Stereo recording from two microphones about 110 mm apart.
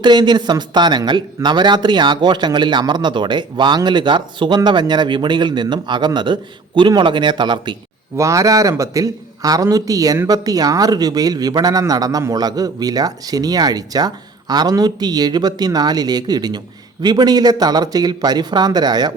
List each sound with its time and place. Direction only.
0.0 s speech: 40° right (ahead or behind)
8.1 s speech: 30° right (ahead or behind)